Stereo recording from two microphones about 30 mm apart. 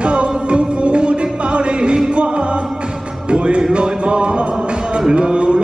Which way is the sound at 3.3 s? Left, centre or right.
Right.